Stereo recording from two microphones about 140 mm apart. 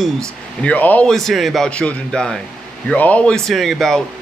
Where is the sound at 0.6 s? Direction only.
10° left (ahead or behind).